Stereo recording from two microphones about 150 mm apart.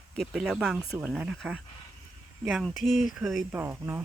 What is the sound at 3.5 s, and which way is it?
Speech, 15° right (ahead or behind).